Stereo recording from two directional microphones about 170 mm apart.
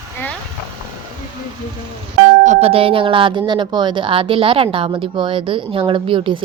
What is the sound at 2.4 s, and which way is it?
A woman's voice, 35° right (ahead or behind).